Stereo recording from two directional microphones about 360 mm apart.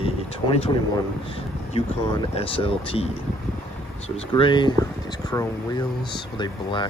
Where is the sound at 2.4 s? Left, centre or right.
Centre.